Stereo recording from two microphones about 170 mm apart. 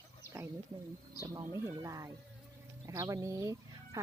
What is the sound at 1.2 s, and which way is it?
Speech, 20° right (ahead or behind).